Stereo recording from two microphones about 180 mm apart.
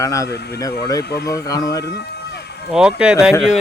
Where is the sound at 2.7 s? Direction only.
5° right (ahead or behind).